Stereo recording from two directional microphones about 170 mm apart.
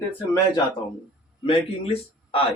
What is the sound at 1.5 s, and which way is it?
Speech, 35° left (ahead or behind).